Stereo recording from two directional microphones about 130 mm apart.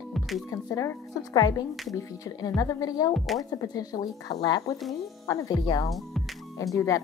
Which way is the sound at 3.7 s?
30° left (ahead or behind).